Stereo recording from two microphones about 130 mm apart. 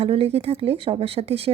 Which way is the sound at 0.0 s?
50° right (ahead or behind).